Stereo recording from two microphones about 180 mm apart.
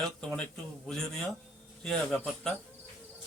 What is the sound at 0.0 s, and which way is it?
Speech, 5° left (ahead or behind).